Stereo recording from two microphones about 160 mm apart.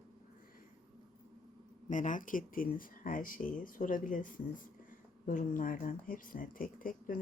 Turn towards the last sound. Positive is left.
turn(degrees=60)  # may be behind; listen again after turning